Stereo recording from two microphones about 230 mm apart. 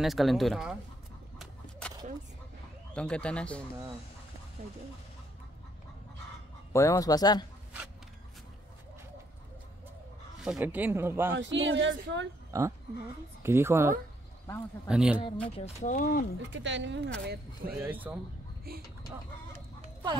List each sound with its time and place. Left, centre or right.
0.0 s speech: centre
1.4 s a sound: centre
2.9 s speech: centre
6.7 s speech: centre
10.4 s speech: centre
11.3 s speech: right
12.5 s speech: centre
15.5 s speech: left
16.3 s speech: right
17.7 s speech: centre
18.7 s speech: right
19.5 s chicken: right